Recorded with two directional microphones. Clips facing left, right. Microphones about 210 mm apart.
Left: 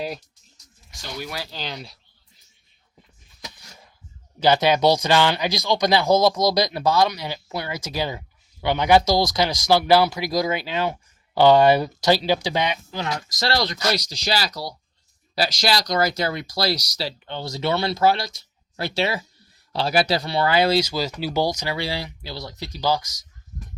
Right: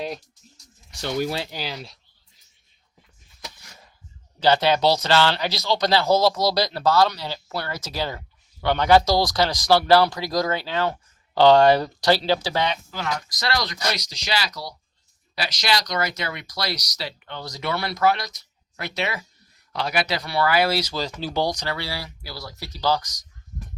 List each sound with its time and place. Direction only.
1.0 s speech: 50° right (ahead or behind)
1.5 s speech: 10° right (ahead or behind)
4.4 s speech: 15° left (ahead or behind)